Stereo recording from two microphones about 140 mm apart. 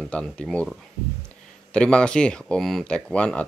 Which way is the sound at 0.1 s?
5° left (ahead or behind).